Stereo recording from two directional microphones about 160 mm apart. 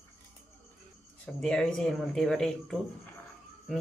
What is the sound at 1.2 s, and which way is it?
Speech, 5° left (ahead or behind).